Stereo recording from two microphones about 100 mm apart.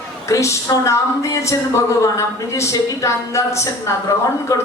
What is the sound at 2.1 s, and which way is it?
A woman's voice, 30° left (ahead or behind).